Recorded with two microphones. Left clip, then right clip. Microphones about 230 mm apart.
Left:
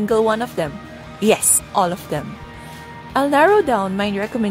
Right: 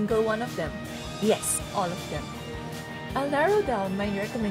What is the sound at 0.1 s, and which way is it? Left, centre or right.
Speech, left.